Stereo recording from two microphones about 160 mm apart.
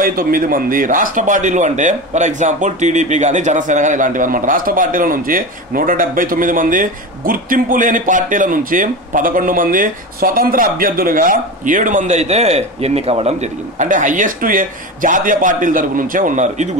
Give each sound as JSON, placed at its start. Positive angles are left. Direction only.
{"t": 0.0, "sound": "a man's voice", "side_deg": -60}